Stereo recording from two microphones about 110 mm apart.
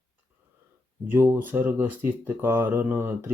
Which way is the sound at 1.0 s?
20° right (ahead or behind).